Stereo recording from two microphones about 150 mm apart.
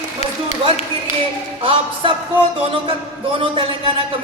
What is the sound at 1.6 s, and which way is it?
Speech, 35° right (ahead or behind).